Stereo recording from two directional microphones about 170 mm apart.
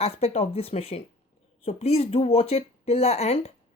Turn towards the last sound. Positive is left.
turn(degrees=40)  # may be behind; listen again after turning